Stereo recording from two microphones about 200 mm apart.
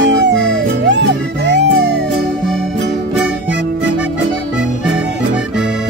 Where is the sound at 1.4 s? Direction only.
60° right (ahead or behind).